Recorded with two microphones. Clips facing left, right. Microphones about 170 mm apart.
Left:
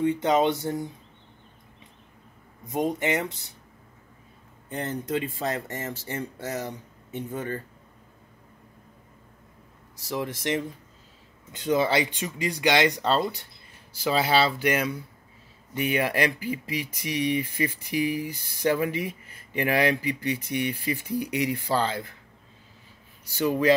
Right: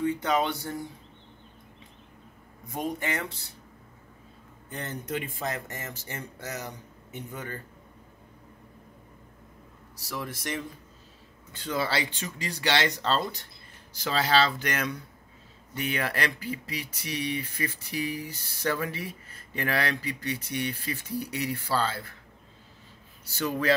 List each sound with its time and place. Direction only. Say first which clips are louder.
0.0 s speech: left 4 dB; 20° left (ahead or behind)
2.7 s speech: left 6 dB; 20° left (ahead or behind)
4.6 s a man's voice: left 5 dB; 30° left (ahead or behind)
10.0 s speech: left 6 dB; 25° left (ahead or behind)
23.2 s speech: left 5 dB; 15° left (ahead or behind)